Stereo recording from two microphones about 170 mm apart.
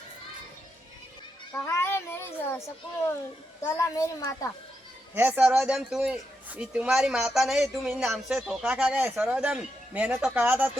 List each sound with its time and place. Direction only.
1.5 s child singing: 15° left (ahead or behind)
3.6 s a child's voice: 20° left (ahead or behind)
5.1 s a man's voice: 10° right (ahead or behind)